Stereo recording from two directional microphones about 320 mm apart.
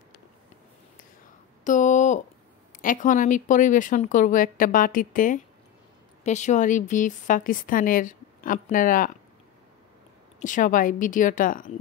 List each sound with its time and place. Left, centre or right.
1.6 s a sound: left
2.8 s a woman's voice: left
10.4 s a woman's voice: left